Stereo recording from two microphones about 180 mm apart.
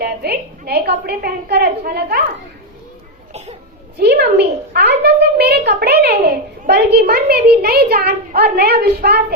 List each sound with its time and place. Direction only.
0.0 s a child's voice: 60° right (ahead or behind)
4.0 s a child's voice: 70° right (ahead or behind)